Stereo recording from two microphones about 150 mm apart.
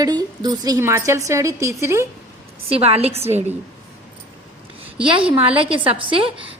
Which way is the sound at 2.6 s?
40° right (ahead or behind).